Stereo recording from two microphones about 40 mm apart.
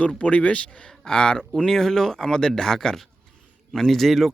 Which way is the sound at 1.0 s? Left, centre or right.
Centre.